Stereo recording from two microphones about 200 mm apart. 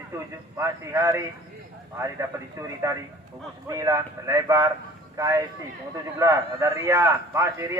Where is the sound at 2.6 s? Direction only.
15° right (ahead or behind).